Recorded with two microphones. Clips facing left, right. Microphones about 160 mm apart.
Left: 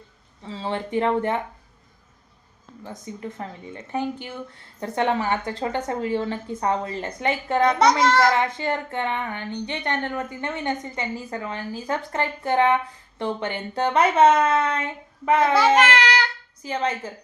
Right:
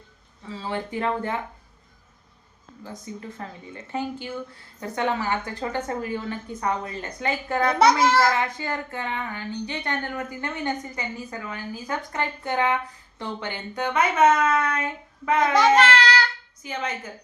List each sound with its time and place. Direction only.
0.4 s speech: 25° left (ahead or behind)
2.8 s speech: 20° left (ahead or behind)
7.7 s a child's voice: 5° right (ahead or behind)
8.3 s speech: 25° left (ahead or behind)
15.5 s child singing: 10° left (ahead or behind)
16.6 s a woman's voice: 30° left (ahead or behind)